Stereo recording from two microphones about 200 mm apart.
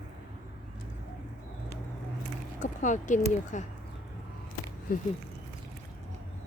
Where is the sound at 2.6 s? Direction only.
40° left (ahead or behind).